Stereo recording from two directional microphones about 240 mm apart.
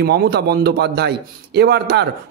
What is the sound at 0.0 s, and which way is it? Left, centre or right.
A man's voice, right.